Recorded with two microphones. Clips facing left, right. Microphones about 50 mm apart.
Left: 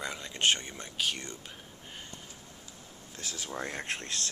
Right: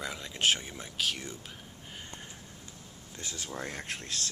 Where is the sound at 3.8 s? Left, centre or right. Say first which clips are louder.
Left 2 dB; left.